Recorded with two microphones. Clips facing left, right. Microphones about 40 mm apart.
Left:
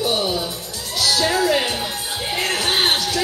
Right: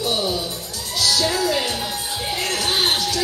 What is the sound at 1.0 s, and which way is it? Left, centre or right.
Music, left.